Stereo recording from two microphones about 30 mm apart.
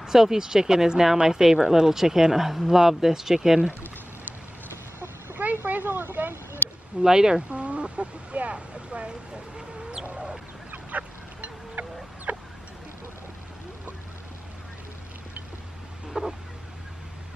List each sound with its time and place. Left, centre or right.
0.0 s speech: centre
5.4 s vehicle: right
7.0 s speech: right
7.4 s speech: right
9.6 s chicken: right
10.7 s goose: right
12.3 s chicken: right
16.1 s a sound: right